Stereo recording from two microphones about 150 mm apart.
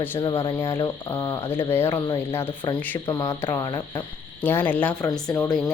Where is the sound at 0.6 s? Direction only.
20° left (ahead or behind).